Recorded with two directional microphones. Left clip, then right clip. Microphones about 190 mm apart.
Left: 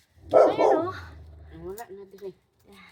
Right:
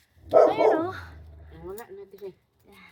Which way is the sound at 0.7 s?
35° right (ahead or behind).